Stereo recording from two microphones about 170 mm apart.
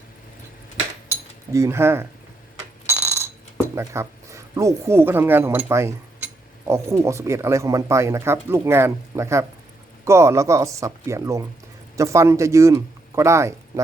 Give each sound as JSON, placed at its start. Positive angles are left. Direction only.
{"t": 1.5, "sound": "speech", "side_deg": -15}
{"t": 2.8, "sound": "a sound", "side_deg": -15}
{"t": 3.8, "sound": "speech", "side_deg": -15}